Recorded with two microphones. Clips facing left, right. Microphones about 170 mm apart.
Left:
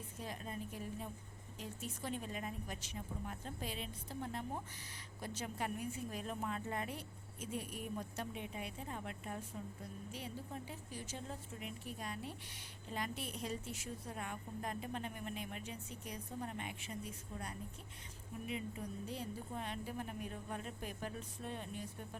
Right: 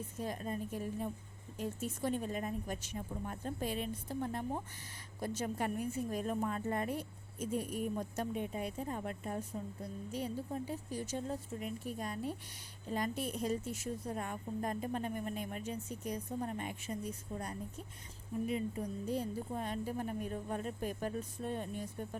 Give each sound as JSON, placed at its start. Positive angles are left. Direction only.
{"t": 0.2, "sound": "a woman's voice", "side_deg": -45}
{"t": 19.0, "sound": "a woman's voice", "side_deg": -45}